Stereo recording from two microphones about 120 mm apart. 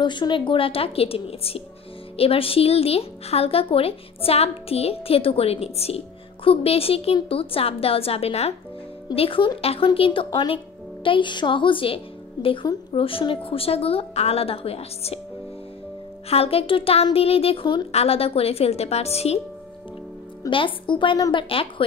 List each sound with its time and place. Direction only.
0.0 s a woman's voice: 40° left (ahead or behind); by 15.1 s 55° left (ahead or behind)
16.3 s a woman's voice: 55° left (ahead or behind)
20.4 s a woman's voice: 45° left (ahead or behind)